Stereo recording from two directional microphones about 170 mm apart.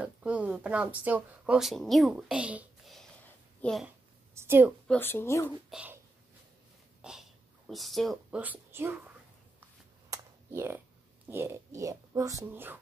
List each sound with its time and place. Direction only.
0.0 s a child's voice: 5° right (ahead or behind)
4.4 s a woman's voice: 10° right (ahead or behind)
4.8 s speech: 10° left (ahead or behind)
5.7 s speech: 5° right (ahead or behind)
7.0 s speech: 5° right (ahead or behind)
10.0 s a sound: 15° right (ahead or behind)
11.2 s speech: 15° right (ahead or behind)